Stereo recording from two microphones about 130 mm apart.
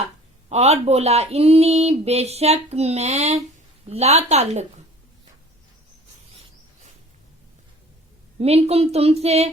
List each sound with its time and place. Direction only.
0.5 s speech: 55° right (ahead or behind)
8.4 s speech: 50° right (ahead or behind)